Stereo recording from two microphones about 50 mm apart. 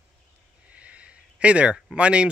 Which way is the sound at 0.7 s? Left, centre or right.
Right.